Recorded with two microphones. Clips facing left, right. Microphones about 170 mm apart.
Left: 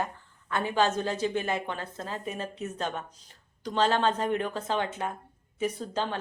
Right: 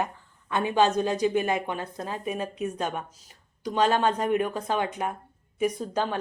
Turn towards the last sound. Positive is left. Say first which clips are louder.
# right 3 dB
turn(degrees=-15)  # may be behind; listen again after turning